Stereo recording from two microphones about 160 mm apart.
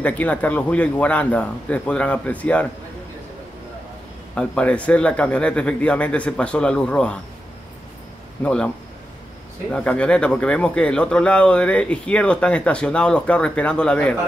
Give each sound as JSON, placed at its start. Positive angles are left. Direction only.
{"t": 0.0, "sound": "speech", "side_deg": 10}
{"t": 4.4, "sound": "speech", "side_deg": 5}
{"t": 8.4, "sound": "speech", "side_deg": 5}